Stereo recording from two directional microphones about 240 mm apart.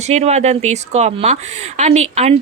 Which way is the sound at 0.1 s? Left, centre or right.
Right.